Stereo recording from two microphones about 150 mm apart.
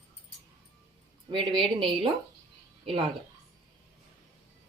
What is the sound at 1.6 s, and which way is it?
Speech, 35° right (ahead or behind).